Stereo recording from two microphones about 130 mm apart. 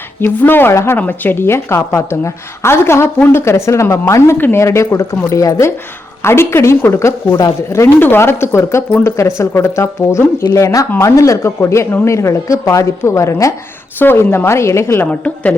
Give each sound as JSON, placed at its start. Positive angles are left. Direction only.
{"t": 0.4, "sound": "a woman's voice", "side_deg": 15}
{"t": 15.0, "sound": "a woman's voice", "side_deg": 10}